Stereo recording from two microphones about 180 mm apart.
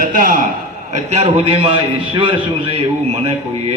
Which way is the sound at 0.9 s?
35° right (ahead or behind).